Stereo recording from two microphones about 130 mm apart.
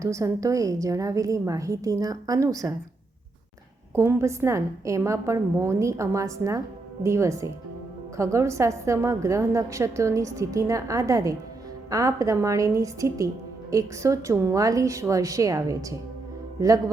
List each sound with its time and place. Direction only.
0.0 s a woman's voice: 25° right (ahead or behind)
3.9 s a woman's voice: 20° right (ahead or behind)